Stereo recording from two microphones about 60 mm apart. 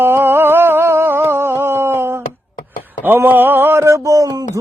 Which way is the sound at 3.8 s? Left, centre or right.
Right.